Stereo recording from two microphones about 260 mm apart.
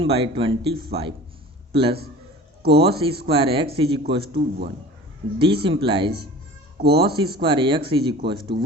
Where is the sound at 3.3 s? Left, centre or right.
Centre.